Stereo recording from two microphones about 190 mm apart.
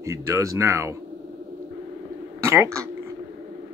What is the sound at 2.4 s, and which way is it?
Speech, 15° right (ahead or behind).